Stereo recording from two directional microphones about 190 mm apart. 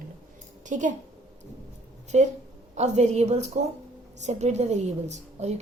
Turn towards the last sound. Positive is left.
turn(degrees=-35)  # may be behind; listen again after turning